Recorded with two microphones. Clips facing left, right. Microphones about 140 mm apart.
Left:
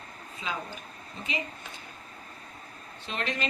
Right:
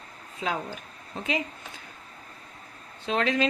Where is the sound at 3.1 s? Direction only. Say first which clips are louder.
Right 9 dB; 90° right.